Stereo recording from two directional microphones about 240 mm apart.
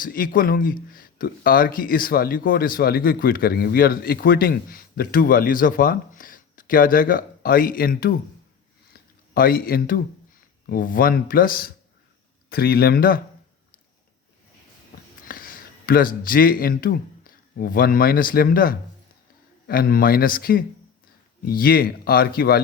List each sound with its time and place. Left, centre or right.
0.0 s speech: left
8.9 s a sound: left
10.7 s speech: left
15.3 s speech: left